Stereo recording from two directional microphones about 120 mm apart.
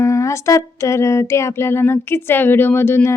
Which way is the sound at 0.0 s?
25° left (ahead or behind).